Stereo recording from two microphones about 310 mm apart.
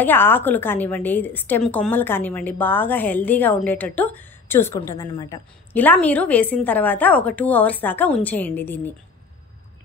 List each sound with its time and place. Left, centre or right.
0.0 s a woman's voice: centre